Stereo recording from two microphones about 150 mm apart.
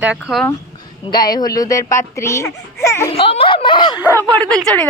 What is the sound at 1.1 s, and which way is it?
Speech, 25° left (ahead or behind).